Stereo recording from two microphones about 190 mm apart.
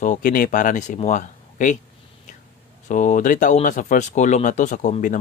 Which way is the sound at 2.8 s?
40° left (ahead or behind).